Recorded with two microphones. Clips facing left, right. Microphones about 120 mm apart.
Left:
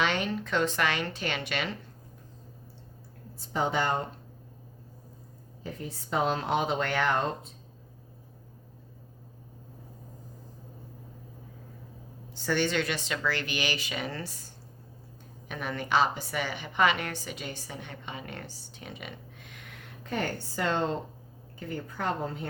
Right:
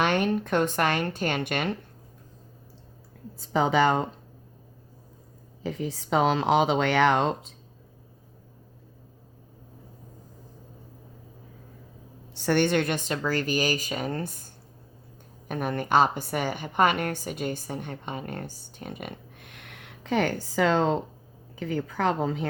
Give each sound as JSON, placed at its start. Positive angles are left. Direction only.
{"t": 0.0, "sound": "a woman's voice", "side_deg": -50}
{"t": 3.5, "sound": "speech", "side_deg": -90}
{"t": 5.6, "sound": "speech", "side_deg": -90}
{"t": 12.3, "sound": "a woman's voice", "side_deg": -60}